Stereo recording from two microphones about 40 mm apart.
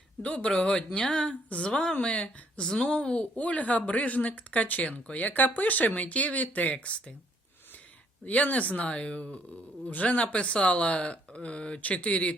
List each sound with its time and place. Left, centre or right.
0.2 s speech: left
1.5 s speech: left
8.2 s speech: left
8.9 s speech: left